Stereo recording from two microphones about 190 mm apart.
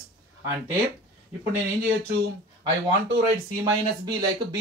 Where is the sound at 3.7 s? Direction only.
20° right (ahead or behind).